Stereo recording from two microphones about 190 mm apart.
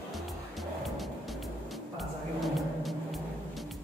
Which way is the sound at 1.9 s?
Centre (ahead or behind).